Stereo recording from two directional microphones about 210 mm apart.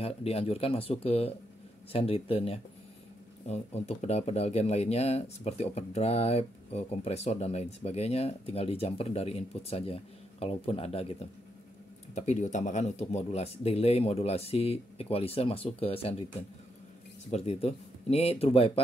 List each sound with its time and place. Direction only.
0.0 s speech: 30° left (ahead or behind)